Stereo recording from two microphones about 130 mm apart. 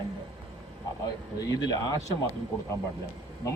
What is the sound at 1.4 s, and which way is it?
Speech, 30° left (ahead or behind).